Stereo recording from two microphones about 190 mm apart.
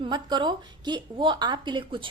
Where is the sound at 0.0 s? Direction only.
25° right (ahead or behind).